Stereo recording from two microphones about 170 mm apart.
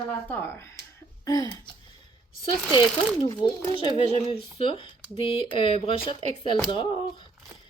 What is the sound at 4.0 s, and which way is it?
Speech, 40° left (ahead or behind).